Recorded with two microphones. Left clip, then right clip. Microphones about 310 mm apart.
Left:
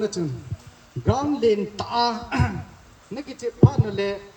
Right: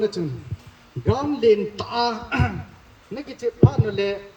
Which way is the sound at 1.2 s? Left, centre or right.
Left.